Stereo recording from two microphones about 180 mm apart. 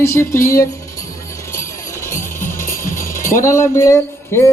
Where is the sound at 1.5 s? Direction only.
15° left (ahead or behind).